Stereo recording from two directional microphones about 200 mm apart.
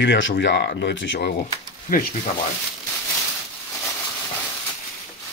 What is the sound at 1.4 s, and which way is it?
Speech, 45° left (ahead or behind).